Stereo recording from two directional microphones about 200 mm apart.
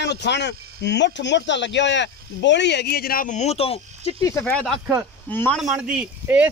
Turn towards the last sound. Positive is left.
turn(degrees=-5)  # may be behind; listen again after turning